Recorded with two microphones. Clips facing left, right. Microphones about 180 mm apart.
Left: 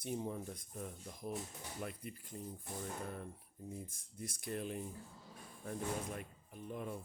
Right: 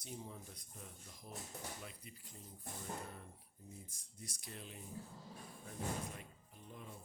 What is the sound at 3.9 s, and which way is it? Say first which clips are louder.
Speech: left 8 dB; 55° left (ahead or behind).